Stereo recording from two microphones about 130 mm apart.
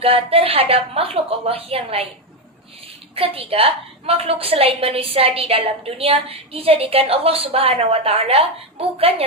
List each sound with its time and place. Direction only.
0.0 s a woman's voice: 45° right (ahead or behind)
3.2 s a woman's voice: 50° right (ahead or behind)